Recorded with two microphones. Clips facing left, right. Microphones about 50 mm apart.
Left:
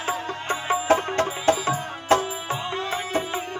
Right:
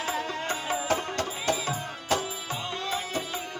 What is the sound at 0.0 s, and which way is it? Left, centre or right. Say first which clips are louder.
Music: left 2 dB; left.